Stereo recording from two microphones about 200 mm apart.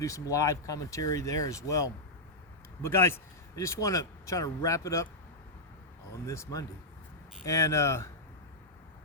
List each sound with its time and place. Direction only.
0.0 s speech: 15° left (ahead or behind)
6.2 s speech: 15° left (ahead or behind)